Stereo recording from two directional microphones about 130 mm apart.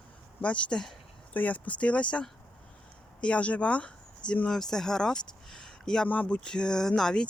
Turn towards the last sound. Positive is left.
turn(degrees=5)  # may be behind; listen again after turning